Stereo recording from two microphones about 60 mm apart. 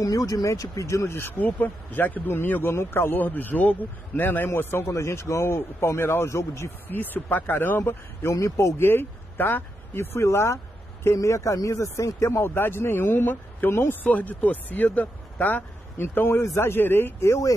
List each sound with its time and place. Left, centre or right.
0.0 s speech: left
1.4 s a man's voice: left
6.9 s a man's voice: left
11.1 s a man's voice: left
14.0 s speech: left